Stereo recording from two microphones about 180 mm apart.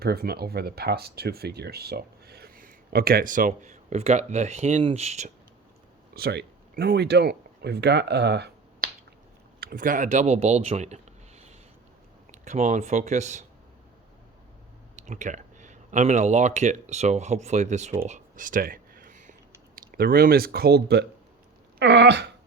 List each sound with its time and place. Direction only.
0.0 s speech: 60° right (ahead or behind); by 5.3 s 40° right (ahead or behind)
6.1 s speech: 60° right (ahead or behind)
9.6 s speech: 50° right (ahead or behind)
14.9 s speech: 40° right (ahead or behind)
18.1 s a sound: 45° right (ahead or behind)
19.7 s speech: 55° right (ahead or behind)
21.8 s a sound: 70° right (ahead or behind)